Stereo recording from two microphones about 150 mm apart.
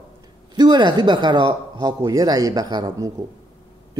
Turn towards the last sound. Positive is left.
turn(degrees=-25)  # may be behind; listen again after turning